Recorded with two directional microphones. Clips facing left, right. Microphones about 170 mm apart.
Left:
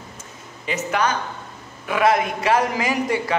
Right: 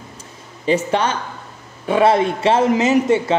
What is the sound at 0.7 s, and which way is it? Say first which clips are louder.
A man's voice: right 5 dB; 30° right (ahead or behind).